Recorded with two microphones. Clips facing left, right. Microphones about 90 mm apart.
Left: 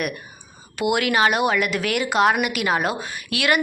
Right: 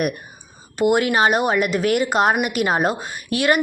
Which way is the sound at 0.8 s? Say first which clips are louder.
Right 3 dB; 40° right (ahead or behind).